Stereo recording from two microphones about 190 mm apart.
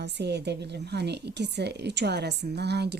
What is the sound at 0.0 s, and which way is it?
Speech, 60° right (ahead or behind).